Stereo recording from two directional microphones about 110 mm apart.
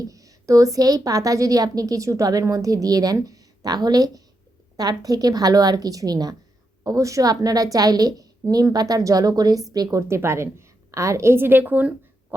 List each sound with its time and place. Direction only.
0.0 s a woman's voice: 30° right (ahead or behind)
10.1 s a woman's voice: 25° right (ahead or behind)